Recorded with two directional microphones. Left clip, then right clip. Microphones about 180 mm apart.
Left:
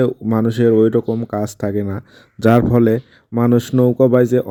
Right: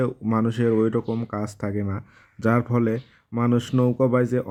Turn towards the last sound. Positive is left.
turn(degrees=30)  # may be behind; listen again after turning